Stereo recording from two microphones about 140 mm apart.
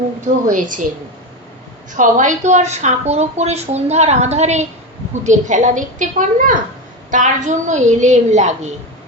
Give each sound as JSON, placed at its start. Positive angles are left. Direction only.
{"t": 0.5, "sound": "a woman's voice", "side_deg": -70}
{"t": 1.9, "sound": "a woman's voice", "side_deg": -65}
{"t": 7.1, "sound": "a woman's voice", "side_deg": -60}